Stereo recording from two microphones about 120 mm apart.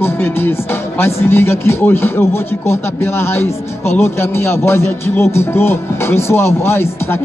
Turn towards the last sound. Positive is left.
turn(degrees=20)  # may be behind; listen again after turning